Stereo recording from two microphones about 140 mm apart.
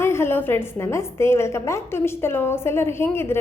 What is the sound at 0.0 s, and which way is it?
A woman's voice, 20° left (ahead or behind).